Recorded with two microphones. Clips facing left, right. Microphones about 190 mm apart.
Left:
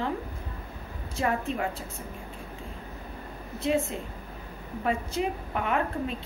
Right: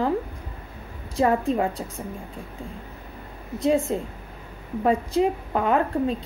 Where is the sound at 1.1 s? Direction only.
35° right (ahead or behind).